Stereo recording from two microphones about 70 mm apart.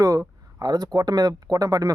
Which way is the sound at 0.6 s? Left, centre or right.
Right.